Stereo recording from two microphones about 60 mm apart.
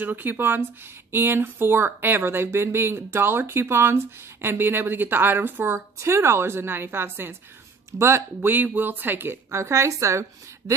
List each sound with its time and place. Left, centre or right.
0.0 s speech: right
5.8 s a woman's voice: right
7.9 s a woman's voice: right
8.4 s speech: right